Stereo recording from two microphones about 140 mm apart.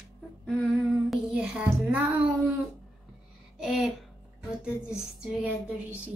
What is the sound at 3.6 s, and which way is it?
Speech, centre (ahead or behind).